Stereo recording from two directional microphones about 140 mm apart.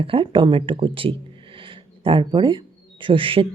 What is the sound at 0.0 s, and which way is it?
Speech, 40° right (ahead or behind).